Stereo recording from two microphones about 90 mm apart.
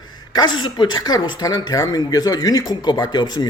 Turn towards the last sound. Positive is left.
turn(degrees=50)  # may be behind; listen again after turning